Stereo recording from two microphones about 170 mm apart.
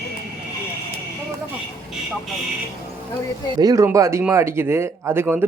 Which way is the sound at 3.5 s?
20° right (ahead or behind).